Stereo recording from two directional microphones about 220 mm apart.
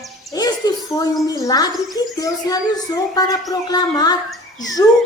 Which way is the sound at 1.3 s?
15° left (ahead or behind).